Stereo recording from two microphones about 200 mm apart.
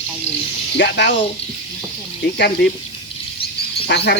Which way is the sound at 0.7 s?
60° left (ahead or behind).